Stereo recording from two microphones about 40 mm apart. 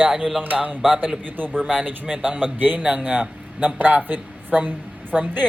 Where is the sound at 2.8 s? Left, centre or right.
Right.